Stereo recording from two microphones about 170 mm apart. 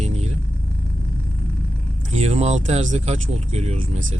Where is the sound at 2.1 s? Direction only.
40° right (ahead or behind).